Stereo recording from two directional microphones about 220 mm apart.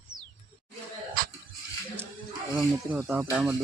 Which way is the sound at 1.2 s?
40° right (ahead or behind).